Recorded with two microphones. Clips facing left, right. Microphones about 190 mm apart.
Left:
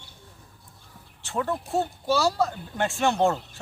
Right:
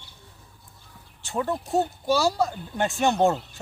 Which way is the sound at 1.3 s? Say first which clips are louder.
Right 1 dB; 15° right (ahead or behind).